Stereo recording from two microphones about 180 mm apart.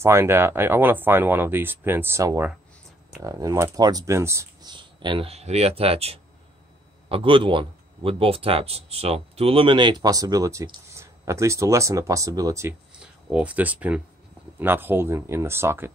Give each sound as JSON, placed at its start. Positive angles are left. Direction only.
{"t": 0.0, "sound": "speech", "side_deg": -15}
{"t": 4.7, "sound": "a man's voice", "side_deg": -25}
{"t": 13.0, "sound": "speech", "side_deg": -5}